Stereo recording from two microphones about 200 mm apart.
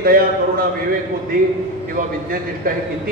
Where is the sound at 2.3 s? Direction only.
45° right (ahead or behind).